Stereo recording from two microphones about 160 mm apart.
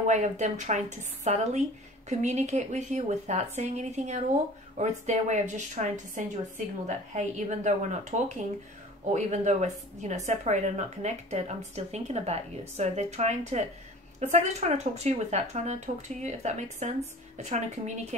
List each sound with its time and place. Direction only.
0.0 s a woman's voice: 50° right (ahead or behind)